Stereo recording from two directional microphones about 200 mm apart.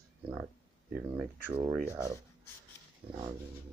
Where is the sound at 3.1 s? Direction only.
15° right (ahead or behind).